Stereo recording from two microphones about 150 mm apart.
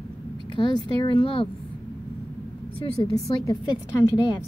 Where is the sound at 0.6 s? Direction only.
35° left (ahead or behind).